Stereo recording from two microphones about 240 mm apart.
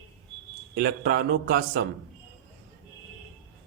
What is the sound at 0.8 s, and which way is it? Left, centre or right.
A man's voice, right.